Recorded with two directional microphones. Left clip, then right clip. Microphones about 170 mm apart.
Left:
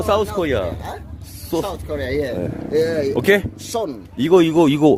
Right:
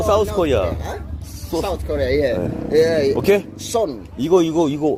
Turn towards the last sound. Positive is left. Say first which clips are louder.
# left 4 dB
turn(degrees=45)  # may be behind; listen again after turning